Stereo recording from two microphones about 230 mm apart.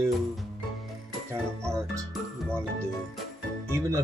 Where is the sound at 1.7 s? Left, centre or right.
Centre.